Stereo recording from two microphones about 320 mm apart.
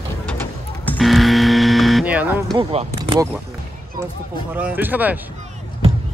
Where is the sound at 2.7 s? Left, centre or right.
Centre.